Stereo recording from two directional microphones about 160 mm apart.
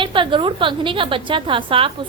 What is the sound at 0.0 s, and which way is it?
A woman's voice, 30° right (ahead or behind).